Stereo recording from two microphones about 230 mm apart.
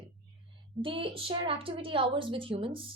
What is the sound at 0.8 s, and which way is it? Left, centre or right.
Speech, right.